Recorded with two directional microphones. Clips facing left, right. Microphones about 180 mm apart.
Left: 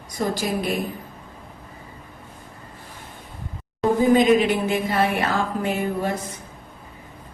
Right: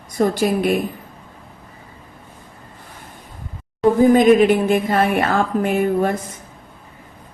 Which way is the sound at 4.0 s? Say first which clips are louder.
Right 5 dB; 50° right (ahead or behind).